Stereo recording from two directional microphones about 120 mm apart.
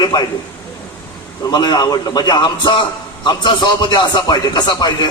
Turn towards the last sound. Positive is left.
turn(degrees=35)  # may be behind; listen again after turning